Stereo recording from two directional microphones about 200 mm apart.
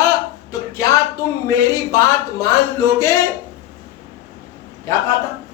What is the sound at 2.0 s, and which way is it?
Speech, 15° left (ahead or behind).